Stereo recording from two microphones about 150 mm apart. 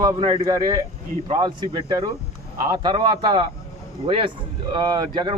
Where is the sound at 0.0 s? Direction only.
30° right (ahead or behind).